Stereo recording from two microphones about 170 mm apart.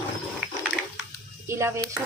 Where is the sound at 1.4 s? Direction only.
15° right (ahead or behind).